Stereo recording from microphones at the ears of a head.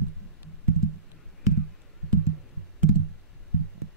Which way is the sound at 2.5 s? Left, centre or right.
Right.